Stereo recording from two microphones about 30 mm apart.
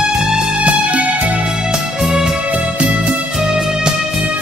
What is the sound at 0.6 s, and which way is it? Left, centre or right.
Music, right.